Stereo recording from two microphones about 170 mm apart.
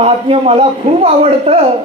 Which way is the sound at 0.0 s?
35° right (ahead or behind).